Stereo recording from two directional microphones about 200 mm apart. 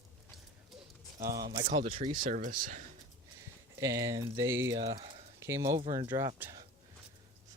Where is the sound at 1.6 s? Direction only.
40° right (ahead or behind).